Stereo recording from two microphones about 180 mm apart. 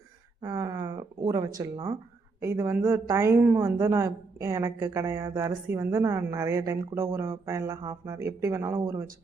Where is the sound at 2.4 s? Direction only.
15° right (ahead or behind).